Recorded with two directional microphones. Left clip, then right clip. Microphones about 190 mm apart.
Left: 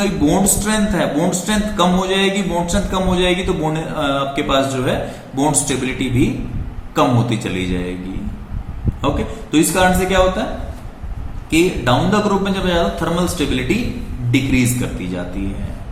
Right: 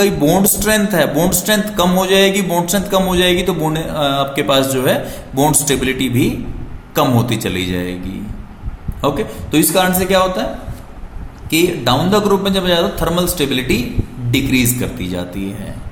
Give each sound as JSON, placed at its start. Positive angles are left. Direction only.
{"t": 0.0, "sound": "a man's voice", "side_deg": -55}
{"t": 9.0, "sound": "a man's voice", "side_deg": -50}
{"t": 11.5, "sound": "a man's voice", "side_deg": -50}